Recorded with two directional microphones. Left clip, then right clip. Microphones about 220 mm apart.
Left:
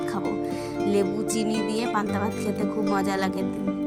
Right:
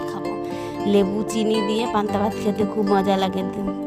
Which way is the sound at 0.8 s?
30° right (ahead or behind).